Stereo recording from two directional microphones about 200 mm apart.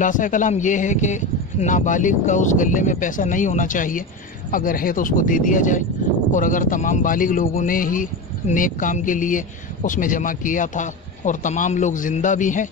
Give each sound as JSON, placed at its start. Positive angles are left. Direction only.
{"t": 0.0, "sound": "speech", "side_deg": 40}